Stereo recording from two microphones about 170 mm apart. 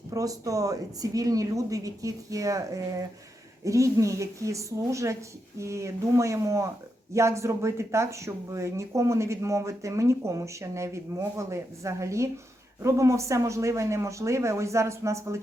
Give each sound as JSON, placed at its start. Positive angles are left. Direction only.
{"t": 0.1, "sound": "a woman's voice", "side_deg": -20}